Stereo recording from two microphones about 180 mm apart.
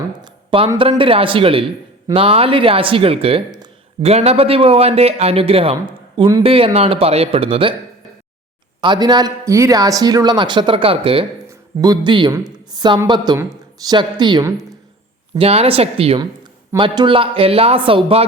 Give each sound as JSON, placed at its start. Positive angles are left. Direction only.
{"t": 0.8, "sound": "speech", "side_deg": -30}
{"t": 8.8, "sound": "speech", "side_deg": -25}
{"t": 15.4, "sound": "speech", "side_deg": -35}